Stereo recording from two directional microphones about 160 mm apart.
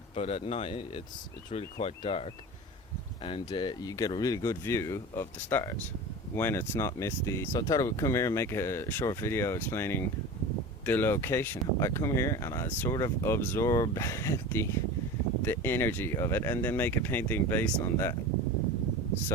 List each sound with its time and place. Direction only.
0.2 s speech: 40° left (ahead or behind)
3.2 s speech: 30° left (ahead or behind); by 18.1 s 15° left (ahead or behind)